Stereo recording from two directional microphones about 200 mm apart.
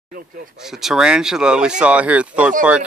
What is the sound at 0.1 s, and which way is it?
Speech, 45° right (ahead or behind).